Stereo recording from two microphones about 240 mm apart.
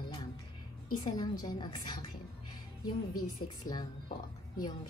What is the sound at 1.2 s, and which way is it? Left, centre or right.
Speech, centre.